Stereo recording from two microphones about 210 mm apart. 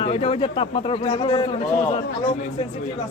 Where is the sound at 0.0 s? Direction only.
25° left (ahead or behind).